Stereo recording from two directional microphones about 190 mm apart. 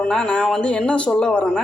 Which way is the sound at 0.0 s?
5° left (ahead or behind).